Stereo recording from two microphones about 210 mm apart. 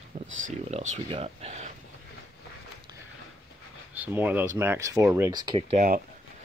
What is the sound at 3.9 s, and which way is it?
Speech, 10° right (ahead or behind).